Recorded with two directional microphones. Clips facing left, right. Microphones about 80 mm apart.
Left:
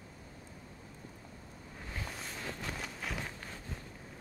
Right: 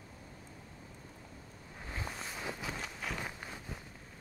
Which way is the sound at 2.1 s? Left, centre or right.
Centre.